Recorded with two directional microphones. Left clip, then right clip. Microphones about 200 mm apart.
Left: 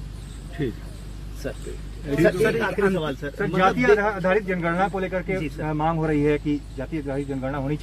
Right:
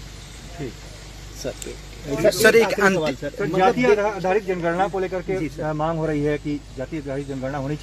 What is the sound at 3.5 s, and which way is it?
Speech, 35° right (ahead or behind).